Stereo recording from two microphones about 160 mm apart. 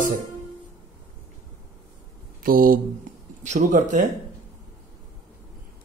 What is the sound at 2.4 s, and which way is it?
Speech, 60° right (ahead or behind).